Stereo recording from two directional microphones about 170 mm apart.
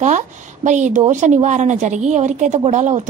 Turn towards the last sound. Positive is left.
turn(degrees=-45)  # may be behind; listen again after turning